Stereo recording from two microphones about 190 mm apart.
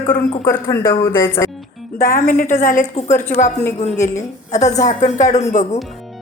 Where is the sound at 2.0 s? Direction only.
45° left (ahead or behind).